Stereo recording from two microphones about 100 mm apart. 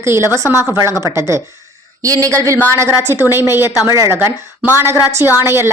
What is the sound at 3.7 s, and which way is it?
Speech, 35° left (ahead or behind).